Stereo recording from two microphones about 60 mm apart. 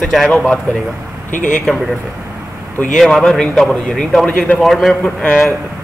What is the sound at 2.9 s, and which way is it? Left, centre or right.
A man's voice, centre.